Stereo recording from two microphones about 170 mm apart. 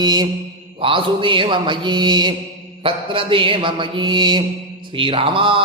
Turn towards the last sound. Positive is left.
turn(degrees=-30)  # may be behind; listen again after turning